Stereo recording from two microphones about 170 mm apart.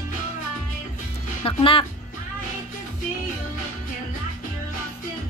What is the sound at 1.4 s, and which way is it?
Speech, 30° left (ahead or behind).